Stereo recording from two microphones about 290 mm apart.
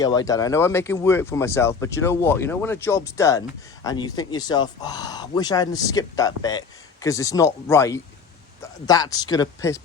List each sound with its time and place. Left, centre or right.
0.0 s speech: centre